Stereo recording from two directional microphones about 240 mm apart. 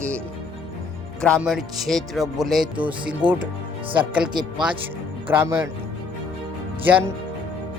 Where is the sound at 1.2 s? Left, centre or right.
Centre.